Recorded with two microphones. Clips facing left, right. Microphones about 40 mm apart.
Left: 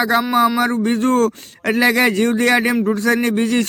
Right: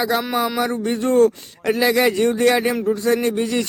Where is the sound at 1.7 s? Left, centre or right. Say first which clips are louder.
Left 2 dB; left.